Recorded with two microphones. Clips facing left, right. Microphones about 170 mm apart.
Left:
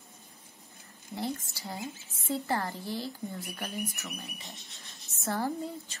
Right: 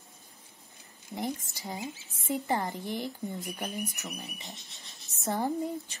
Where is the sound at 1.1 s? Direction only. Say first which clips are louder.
Even; 15° right (ahead or behind).